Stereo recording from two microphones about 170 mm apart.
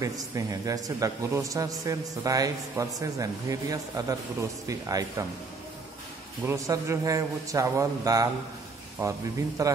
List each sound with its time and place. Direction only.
0.0 s speech: 20° right (ahead or behind)
6.4 s speech: 15° right (ahead or behind)